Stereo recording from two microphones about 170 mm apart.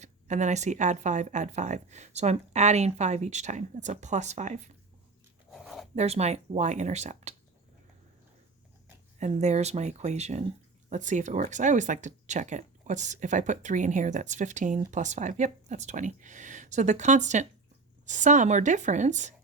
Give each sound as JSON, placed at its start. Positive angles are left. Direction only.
{"t": 0.0, "sound": "speech", "side_deg": -45}
{"t": 5.5, "sound": "a sound", "side_deg": 0}
{"t": 6.0, "sound": "speech", "side_deg": -40}
{"t": 9.1, "sound": "speech", "side_deg": -45}